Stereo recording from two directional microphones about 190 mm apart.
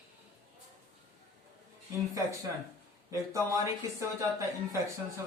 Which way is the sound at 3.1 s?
15° right (ahead or behind).